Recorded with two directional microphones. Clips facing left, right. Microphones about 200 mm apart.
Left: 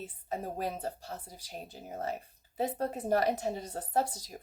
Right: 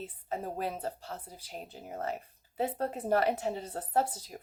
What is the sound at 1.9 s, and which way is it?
A woman's voice, 35° left (ahead or behind).